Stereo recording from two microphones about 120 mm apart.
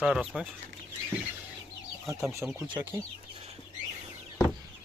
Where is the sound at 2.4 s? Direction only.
15° right (ahead or behind).